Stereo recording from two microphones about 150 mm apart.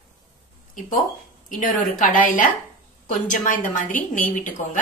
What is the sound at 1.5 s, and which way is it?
A woman's voice, 65° left (ahead or behind).